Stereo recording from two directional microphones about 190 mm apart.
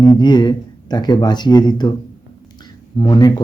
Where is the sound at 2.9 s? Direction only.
20° left (ahead or behind).